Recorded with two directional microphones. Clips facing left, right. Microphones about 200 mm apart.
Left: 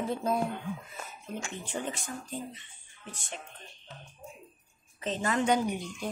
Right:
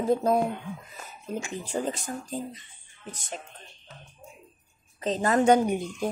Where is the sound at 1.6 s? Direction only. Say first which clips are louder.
Right 6 dB; 40° right (ahead or behind).